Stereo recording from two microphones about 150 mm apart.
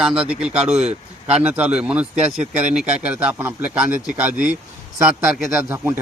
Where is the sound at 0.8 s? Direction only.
45° right (ahead or behind).